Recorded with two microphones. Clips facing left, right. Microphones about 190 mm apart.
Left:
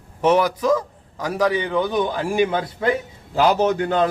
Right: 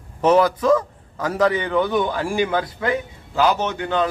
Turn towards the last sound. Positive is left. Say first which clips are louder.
# left 4 dB
turn(degrees=40)  # may be behind; listen again after turning